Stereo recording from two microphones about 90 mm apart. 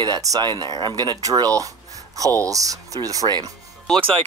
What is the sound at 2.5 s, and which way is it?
Speech, 40° right (ahead or behind).